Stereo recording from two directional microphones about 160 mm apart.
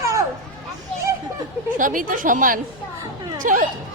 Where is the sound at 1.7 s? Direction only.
55° right (ahead or behind).